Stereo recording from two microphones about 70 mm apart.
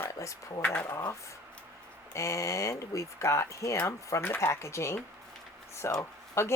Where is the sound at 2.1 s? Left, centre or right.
Left.